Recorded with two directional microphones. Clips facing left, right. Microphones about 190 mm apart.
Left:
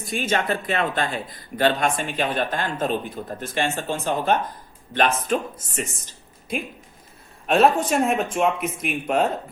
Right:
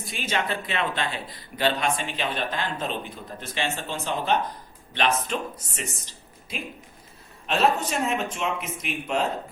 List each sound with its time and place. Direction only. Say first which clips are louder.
0.0 s a man's voice: left 5 dB; 50° left (ahead or behind)